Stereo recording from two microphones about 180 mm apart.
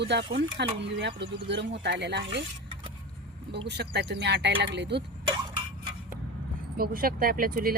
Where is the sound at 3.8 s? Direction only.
65° right (ahead or behind).